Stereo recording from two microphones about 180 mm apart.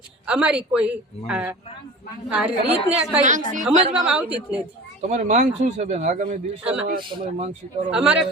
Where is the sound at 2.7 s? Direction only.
10° right (ahead or behind).